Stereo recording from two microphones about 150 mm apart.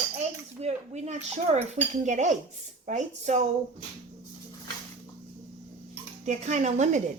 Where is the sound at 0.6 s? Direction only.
45° right (ahead or behind).